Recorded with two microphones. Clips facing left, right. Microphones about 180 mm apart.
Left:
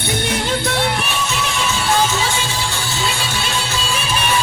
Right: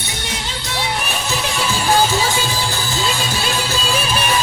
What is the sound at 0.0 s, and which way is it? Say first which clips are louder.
Music: left 7 dB; 55° left (ahead or behind).